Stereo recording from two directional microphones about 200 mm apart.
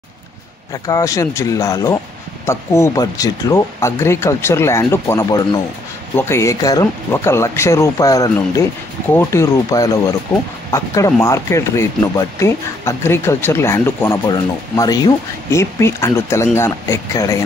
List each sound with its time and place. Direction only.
0.8 s speech: 15° left (ahead or behind)